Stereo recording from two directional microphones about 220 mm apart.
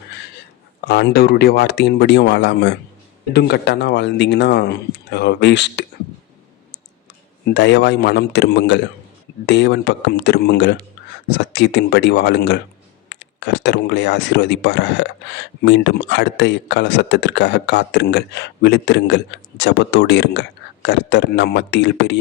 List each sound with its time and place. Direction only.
0.9 s speech: 50° left (ahead or behind)
7.4 s speech: 50° left (ahead or behind)